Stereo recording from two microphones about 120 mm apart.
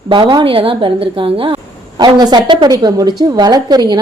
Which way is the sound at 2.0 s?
35° right (ahead or behind).